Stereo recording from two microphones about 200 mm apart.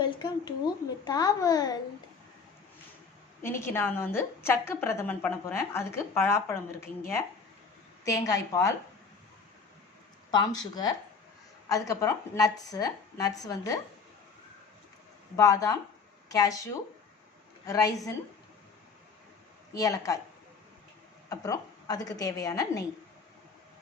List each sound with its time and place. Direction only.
0.0 s a sound: 20° left (ahead or behind)
1.0 s a child's voice: 20° left (ahead or behind)
3.4 s a woman's voice: 15° left (ahead or behind)
8.0 s a woman's voice: 15° left (ahead or behind)
10.3 s a child's voice: 20° left (ahead or behind)
15.4 s a woman's voice: 15° left (ahead or behind)
17.7 s a woman's voice: 15° left (ahead or behind)
19.7 s a woman's voice: 15° left (ahead or behind)
21.2 s a woman's voice: 15° left (ahead or behind)